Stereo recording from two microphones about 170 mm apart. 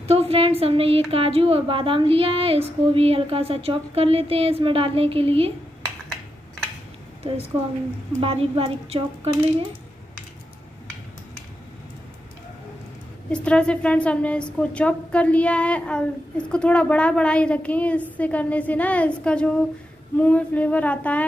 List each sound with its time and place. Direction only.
0.0 s a woman's voice: 35° right (ahead or behind)
8.2 s a woman's voice: 35° right (ahead or behind)
13.3 s a woman's voice: 5° left (ahead or behind)